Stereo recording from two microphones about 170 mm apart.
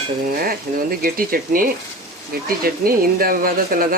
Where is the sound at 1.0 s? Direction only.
60° right (ahead or behind).